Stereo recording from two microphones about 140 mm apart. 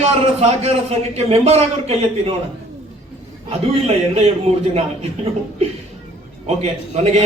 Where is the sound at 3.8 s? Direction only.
50° right (ahead or behind).